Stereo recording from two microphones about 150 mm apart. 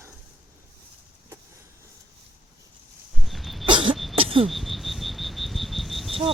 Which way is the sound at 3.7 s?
35° right (ahead or behind).